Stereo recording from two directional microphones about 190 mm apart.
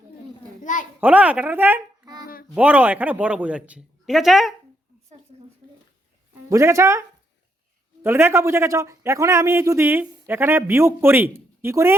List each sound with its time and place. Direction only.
0.6 s a sound: 40° left (ahead or behind)
1.0 s a man's voice: 10° right (ahead or behind)
2.2 s a sound: 50° left (ahead or behind)
2.6 s a man's voice: 10° right (ahead or behind)
6.5 s a man's voice: 15° right (ahead or behind)
8.0 s a man's voice: 10° right (ahead or behind)